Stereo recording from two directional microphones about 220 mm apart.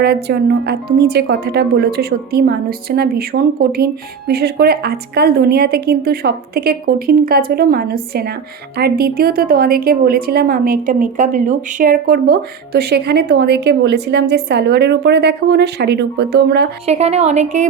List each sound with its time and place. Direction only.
0.0 s a woman's voice: 45° right (ahead or behind)
16.8 s a woman's voice: 30° right (ahead or behind)